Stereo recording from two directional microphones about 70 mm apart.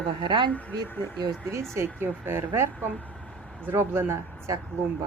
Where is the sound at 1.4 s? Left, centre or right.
Right.